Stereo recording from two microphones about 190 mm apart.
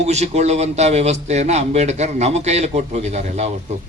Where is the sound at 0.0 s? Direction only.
35° right (ahead or behind).